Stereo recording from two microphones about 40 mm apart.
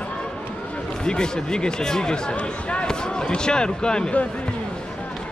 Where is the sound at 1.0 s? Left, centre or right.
Centre.